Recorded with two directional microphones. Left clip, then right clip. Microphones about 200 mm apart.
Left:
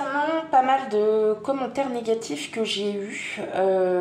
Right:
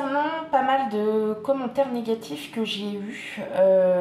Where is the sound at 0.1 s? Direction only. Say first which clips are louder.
Left 3 dB; 35° left (ahead or behind).